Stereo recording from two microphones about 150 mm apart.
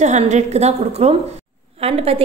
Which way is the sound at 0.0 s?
50° right (ahead or behind).